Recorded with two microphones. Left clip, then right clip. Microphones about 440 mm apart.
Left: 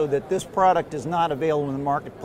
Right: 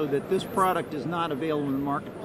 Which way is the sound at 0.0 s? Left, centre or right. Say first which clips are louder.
Left 3 dB; centre.